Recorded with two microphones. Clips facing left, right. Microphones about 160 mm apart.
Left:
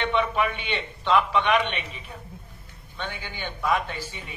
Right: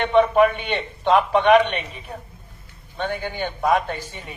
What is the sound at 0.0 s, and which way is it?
A man's voice, 50° right (ahead or behind).